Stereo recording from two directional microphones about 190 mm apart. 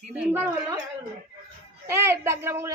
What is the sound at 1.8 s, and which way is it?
Speech, 15° right (ahead or behind).